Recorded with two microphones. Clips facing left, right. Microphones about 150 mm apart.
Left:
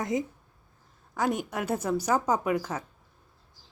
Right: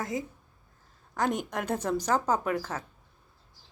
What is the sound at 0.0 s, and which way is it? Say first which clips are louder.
Speech: left 4 dB; 20° left (ahead or behind).